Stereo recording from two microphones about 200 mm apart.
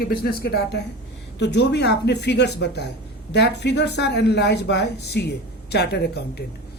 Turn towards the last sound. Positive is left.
turn(degrees=55)  # may be behind; listen again after turning